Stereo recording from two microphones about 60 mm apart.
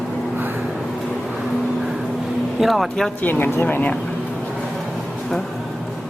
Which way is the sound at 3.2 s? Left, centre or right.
Left.